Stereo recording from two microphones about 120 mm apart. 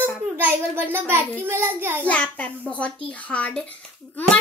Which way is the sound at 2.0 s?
10° left (ahead or behind).